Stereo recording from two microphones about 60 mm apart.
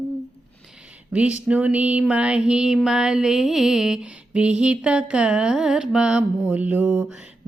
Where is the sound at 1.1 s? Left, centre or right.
Right.